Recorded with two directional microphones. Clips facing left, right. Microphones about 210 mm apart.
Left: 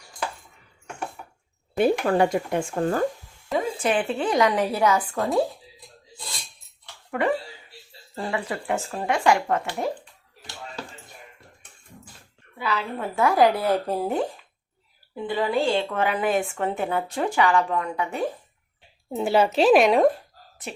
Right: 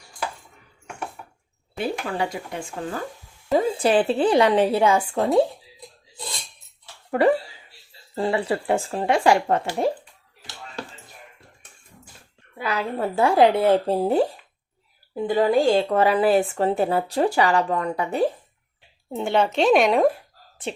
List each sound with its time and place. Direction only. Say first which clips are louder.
1.7 s speech: left 7 dB; 50° left (ahead or behind)
3.5 s a woman's voice: right 5 dB; 35° right (ahead or behind)
7.1 s speech: right 5 dB; 35° right (ahead or behind)
12.5 s a woman's voice: right 3 dB; 45° right (ahead or behind)
15.1 s speech: right 5 dB; 45° right (ahead or behind)
19.1 s speech: left 1 dB; 5° left (ahead or behind)
20.6 s a woman's voice: right 6 dB; 30° right (ahead or behind)